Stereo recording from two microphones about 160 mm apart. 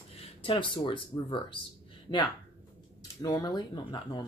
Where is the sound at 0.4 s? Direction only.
30° left (ahead or behind).